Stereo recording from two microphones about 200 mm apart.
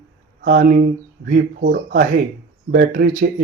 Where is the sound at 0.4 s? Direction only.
50° right (ahead or behind).